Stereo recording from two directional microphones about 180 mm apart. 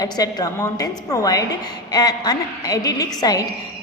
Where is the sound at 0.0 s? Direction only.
20° left (ahead or behind).